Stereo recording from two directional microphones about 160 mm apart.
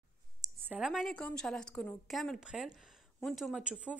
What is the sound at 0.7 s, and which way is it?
A woman's voice, 5° right (ahead or behind).